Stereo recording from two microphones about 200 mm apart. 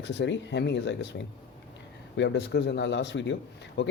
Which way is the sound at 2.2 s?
60° left (ahead or behind).